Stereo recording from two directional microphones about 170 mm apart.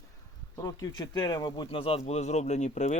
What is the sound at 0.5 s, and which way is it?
Speech, 20° left (ahead or behind).